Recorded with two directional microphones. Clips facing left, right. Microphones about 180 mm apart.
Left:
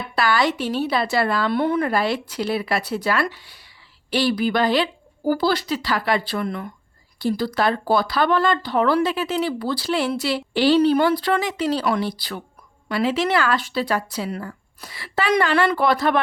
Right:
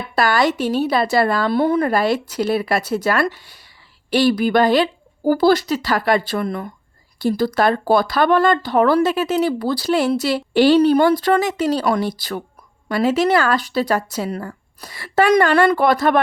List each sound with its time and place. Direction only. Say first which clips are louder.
0.2 s speech: right 3 dB; 45° right (ahead or behind)